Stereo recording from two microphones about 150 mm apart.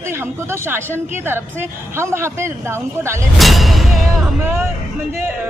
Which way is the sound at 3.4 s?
Centre (ahead or behind).